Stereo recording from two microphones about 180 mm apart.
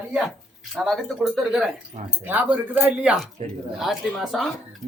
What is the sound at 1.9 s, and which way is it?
Speech, 40° right (ahead or behind).